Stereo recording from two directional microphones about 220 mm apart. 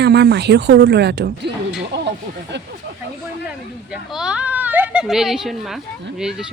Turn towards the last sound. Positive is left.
turn(degrees=-5)  # may be behind; listen again after turning